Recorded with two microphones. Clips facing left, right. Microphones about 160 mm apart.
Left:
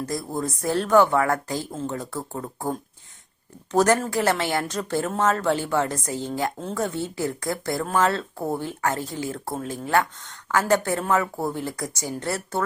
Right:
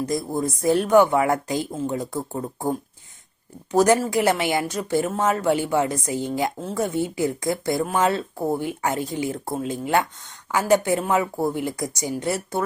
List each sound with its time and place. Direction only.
0.0 s speech: 15° right (ahead or behind)
6.6 s speech: 5° right (ahead or behind)
6.8 s speech: 15° right (ahead or behind)